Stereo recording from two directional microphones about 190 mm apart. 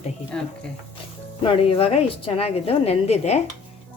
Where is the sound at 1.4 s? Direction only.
30° left (ahead or behind).